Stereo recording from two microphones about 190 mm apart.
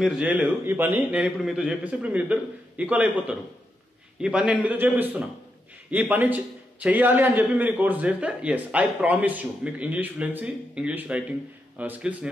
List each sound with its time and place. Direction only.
0.0 s a man's voice: 5° right (ahead or behind)